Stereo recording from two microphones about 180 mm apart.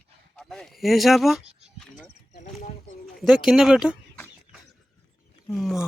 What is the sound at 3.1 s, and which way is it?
Speech, centre (ahead or behind).